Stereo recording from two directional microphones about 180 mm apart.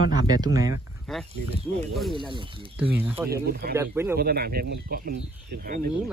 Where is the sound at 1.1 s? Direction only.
Centre (ahead or behind).